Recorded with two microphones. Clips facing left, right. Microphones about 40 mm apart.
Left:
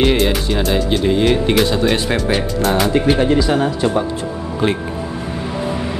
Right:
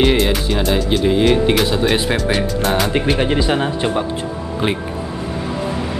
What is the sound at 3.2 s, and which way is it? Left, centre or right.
Speech, right.